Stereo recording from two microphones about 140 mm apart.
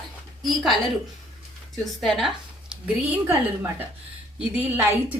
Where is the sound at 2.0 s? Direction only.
Centre (ahead or behind).